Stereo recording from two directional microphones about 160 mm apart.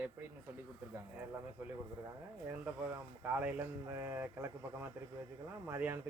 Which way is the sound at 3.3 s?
10° right (ahead or behind).